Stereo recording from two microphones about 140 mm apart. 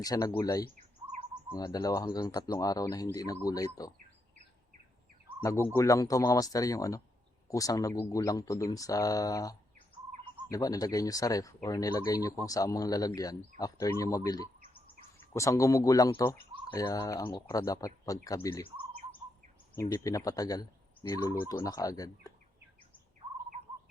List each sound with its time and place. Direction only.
0.0 s speech: 25° left (ahead or behind)
5.4 s speech: 20° left (ahead or behind)
19.9 s speech: 25° left (ahead or behind)